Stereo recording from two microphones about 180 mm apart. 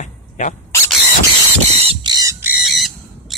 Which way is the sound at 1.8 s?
35° right (ahead or behind).